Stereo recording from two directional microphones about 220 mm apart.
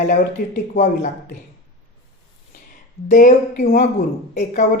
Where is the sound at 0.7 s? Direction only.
35° left (ahead or behind).